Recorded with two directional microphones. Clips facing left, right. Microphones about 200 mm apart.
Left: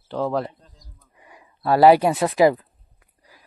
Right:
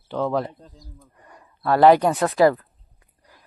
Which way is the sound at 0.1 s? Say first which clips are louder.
Even; centre (ahead or behind).